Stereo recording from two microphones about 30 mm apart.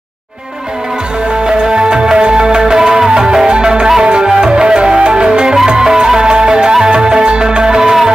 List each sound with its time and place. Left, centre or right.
1.4 s music: right